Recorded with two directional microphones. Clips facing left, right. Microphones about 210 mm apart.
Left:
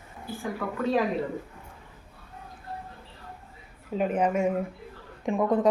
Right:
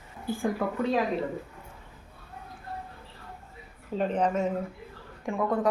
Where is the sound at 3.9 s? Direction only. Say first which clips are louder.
Left 1 dB; 10° left (ahead or behind).